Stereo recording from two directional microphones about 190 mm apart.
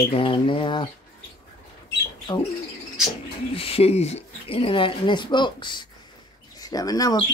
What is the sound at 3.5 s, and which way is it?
Speech, 30° left (ahead or behind).